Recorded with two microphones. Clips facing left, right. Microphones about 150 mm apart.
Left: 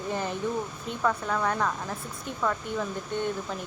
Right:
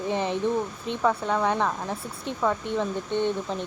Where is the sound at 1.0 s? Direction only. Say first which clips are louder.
Right 3 dB; 25° right (ahead or behind).